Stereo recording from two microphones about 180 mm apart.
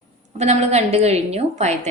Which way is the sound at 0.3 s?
40° right (ahead or behind).